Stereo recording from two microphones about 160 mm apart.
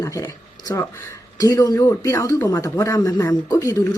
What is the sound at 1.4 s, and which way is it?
Speech, 20° left (ahead or behind).